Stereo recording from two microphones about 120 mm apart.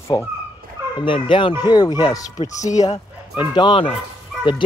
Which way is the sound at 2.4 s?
80° left.